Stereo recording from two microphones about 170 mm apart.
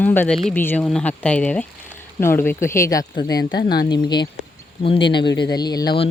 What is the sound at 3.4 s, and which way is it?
Speech, 70° left (ahead or behind).